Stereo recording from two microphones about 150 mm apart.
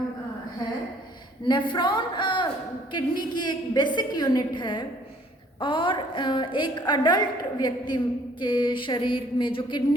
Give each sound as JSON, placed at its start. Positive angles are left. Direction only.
{"t": 1.5, "sound": "a woman's voice", "side_deg": 30}